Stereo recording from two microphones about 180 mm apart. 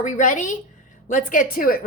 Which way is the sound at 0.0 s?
45° left (ahead or behind).